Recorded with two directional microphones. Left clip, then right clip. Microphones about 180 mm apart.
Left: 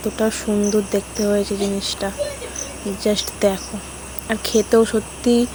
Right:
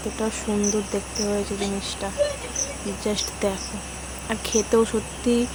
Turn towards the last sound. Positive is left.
turn(degrees=25)  # may be behind; listen again after turning